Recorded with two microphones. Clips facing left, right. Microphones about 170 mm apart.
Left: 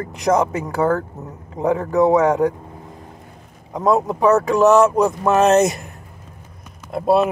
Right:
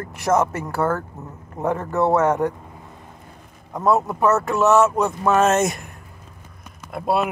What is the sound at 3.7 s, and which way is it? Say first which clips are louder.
Speech: left 2 dB; 15° left (ahead or behind).